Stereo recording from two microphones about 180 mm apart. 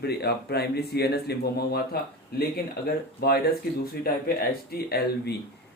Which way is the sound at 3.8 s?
55° left (ahead or behind).